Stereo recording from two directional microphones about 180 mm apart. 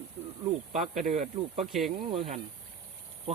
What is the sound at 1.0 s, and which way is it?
Speech, 40° right (ahead or behind).